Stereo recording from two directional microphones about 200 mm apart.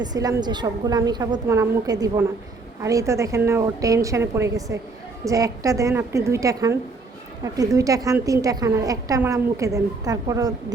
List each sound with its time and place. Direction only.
0.0 s a woman's voice: 20° right (ahead or behind)